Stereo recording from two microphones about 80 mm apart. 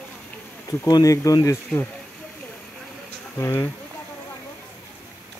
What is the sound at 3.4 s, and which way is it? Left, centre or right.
Speech, left.